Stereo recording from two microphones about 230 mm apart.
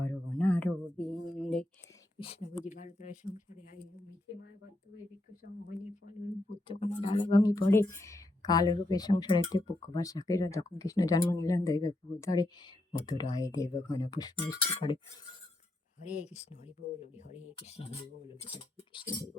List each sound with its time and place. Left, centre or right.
0.0 s a sound: centre
2.1 s a sound: left
2.6 s speech: left
4.9 s speech: left
6.7 s speech: left
16.0 s speech: left